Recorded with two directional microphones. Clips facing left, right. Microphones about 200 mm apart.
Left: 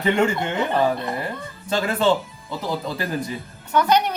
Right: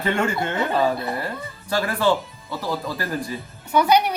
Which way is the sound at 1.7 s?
20° left (ahead or behind).